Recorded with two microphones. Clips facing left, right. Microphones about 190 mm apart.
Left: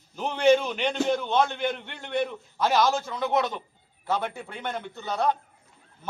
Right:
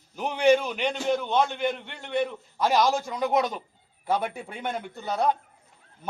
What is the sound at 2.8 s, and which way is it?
A man's voice, 10° right (ahead or behind).